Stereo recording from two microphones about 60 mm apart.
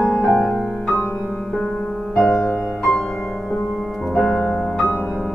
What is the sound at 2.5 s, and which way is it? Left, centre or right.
Music, right.